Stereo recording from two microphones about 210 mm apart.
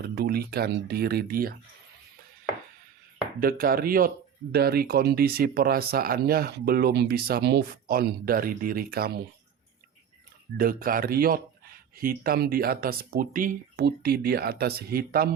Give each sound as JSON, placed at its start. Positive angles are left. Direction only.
{"t": 0.2, "sound": "speech", "side_deg": -45}
{"t": 3.4, "sound": "speech", "side_deg": -45}
{"t": 10.6, "sound": "speech", "side_deg": -45}